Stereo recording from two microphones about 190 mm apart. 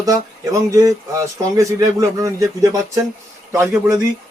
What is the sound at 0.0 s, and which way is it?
Speech, 15° right (ahead or behind).